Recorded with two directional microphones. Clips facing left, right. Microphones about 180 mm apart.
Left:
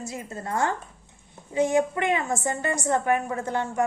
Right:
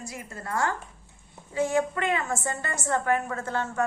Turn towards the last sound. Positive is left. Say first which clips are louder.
# left 3 dB
turn(degrees=15)  # may be behind; listen again after turning